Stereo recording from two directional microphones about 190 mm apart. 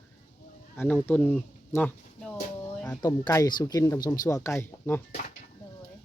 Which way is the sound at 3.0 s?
20° left (ahead or behind).